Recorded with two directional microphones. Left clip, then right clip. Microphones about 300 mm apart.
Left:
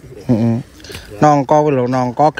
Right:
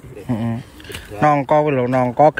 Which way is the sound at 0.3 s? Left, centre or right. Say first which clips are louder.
Left 8 dB; centre.